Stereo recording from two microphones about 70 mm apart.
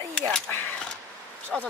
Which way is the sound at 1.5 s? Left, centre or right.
Centre.